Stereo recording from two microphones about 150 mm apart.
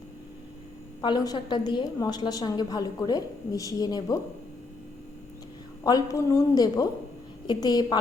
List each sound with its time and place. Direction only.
1.0 s a woman's voice: 25° left (ahead or behind)
5.8 s a woman's voice: 25° left (ahead or behind)